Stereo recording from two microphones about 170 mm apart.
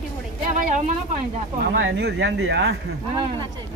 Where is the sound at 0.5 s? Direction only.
50° right (ahead or behind).